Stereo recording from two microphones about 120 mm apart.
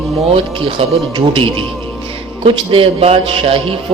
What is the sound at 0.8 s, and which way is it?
A man's voice, 50° right (ahead or behind).